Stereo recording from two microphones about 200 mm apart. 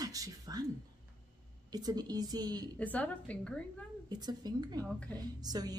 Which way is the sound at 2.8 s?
5° left (ahead or behind).